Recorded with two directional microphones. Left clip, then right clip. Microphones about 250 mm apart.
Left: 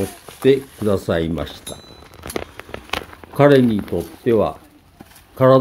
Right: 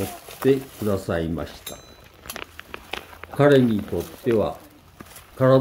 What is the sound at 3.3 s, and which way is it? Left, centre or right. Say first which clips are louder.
Speech: left 4 dB; centre.